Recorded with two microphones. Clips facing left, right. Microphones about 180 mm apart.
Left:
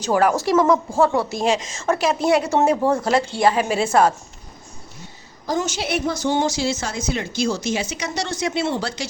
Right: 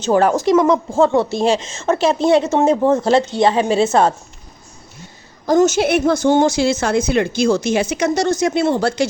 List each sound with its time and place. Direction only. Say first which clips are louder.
0.0 s speech: right 4 dB; 25° right (ahead or behind)
5.5 s a woman's voice: right 10 dB; 45° right (ahead or behind)